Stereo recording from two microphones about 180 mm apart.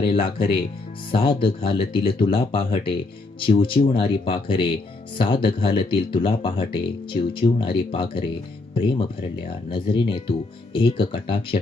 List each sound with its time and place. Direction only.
0.0 s speech: 30° left (ahead or behind)